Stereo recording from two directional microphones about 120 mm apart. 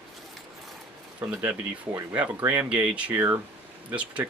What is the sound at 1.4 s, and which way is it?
Speech, 20° right (ahead or behind).